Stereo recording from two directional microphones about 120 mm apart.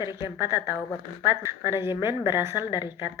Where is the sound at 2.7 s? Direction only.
40° left (ahead or behind).